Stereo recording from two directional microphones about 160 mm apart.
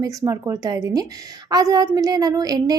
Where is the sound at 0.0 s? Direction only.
20° right (ahead or behind).